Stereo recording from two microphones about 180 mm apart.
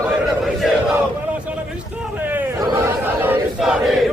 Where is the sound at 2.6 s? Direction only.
20° right (ahead or behind).